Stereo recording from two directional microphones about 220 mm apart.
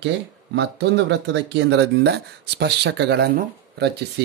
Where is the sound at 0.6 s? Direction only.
50° right (ahead or behind).